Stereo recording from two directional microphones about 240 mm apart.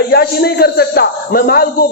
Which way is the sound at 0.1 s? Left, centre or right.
Left.